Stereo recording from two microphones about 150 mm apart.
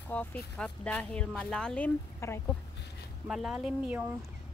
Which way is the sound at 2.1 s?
15° left (ahead or behind).